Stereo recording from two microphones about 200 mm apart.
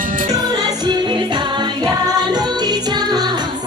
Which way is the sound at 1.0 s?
25° right (ahead or behind).